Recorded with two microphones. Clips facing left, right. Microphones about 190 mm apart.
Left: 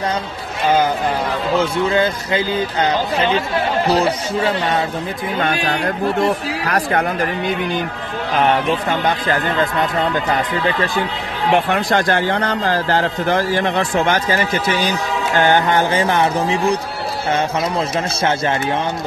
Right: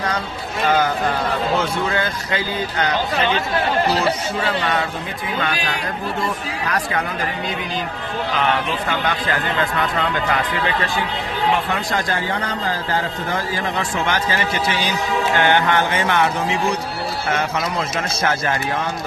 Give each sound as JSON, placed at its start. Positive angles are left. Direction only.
{"t": 1.9, "sound": "speech", "side_deg": 25}
{"t": 5.4, "sound": "a man's voice", "side_deg": 50}
{"t": 11.5, "sound": "a man's voice", "side_deg": 65}
{"t": 15.3, "sound": "music", "side_deg": 35}